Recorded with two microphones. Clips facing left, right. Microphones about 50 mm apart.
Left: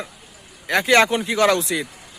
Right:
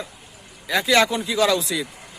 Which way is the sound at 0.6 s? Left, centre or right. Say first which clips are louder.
Left 2 dB; left.